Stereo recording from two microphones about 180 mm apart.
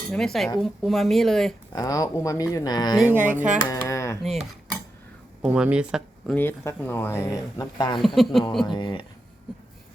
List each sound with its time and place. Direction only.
0.1 s speech: centre (ahead or behind)
1.7 s speech: 20° left (ahead or behind)
3.4 s speech: 5° right (ahead or behind)
3.7 s a sound: 15° left (ahead or behind)
4.2 s speech: centre (ahead or behind)
6.3 s speech: 10° left (ahead or behind)
8.0 s speech: centre (ahead or behind)
8.6 s speech: 25° left (ahead or behind)